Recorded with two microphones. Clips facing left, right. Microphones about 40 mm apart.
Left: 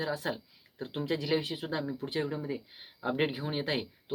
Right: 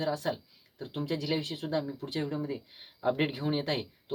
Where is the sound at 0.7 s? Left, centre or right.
Left.